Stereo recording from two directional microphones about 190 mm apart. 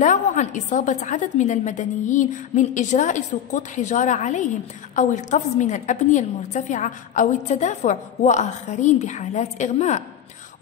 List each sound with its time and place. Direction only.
0.0 s a woman's voice: 40° left (ahead or behind)